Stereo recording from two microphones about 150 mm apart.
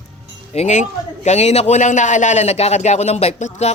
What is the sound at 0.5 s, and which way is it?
A man's voice, 50° left (ahead or behind).